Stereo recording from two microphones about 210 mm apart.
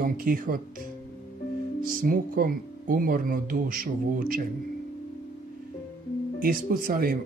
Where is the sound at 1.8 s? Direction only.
40° right (ahead or behind).